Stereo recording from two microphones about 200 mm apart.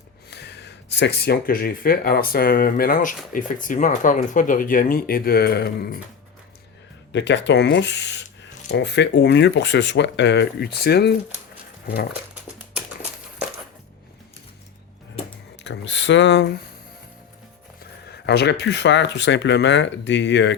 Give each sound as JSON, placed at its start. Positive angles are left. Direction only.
{"t": 0.3, "sound": "speech", "side_deg": 55}
{"t": 7.1, "sound": "speech", "side_deg": 60}
{"t": 15.6, "sound": "speech", "side_deg": 65}
{"t": 18.1, "sound": "speech", "side_deg": 55}